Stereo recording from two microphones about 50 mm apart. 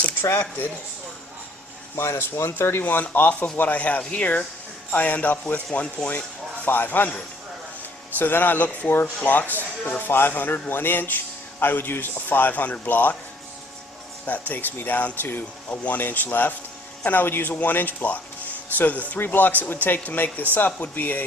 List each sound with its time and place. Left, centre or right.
0.0 s a sound: left
2.0 s speech: left
2.8 s speech: left
6.7 s speech: left
8.2 s speech: left
14.3 s speech: left